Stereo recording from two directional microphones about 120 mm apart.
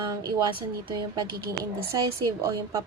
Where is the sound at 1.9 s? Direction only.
30° right (ahead or behind).